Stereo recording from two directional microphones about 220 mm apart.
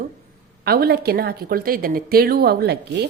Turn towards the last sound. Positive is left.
turn(degrees=-50)  # may be behind; listen again after turning